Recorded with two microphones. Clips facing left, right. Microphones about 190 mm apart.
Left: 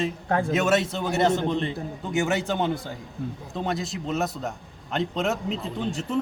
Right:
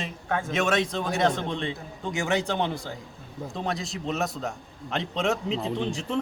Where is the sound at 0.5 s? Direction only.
5° left (ahead or behind).